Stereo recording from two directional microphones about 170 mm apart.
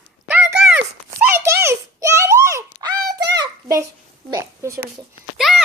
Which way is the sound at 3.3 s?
20° right (ahead or behind).